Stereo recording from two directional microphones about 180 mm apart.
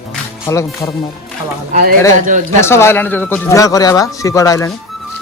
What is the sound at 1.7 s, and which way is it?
Speech, 55° right (ahead or behind).